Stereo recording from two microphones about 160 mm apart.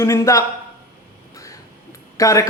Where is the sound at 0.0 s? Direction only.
20° left (ahead or behind).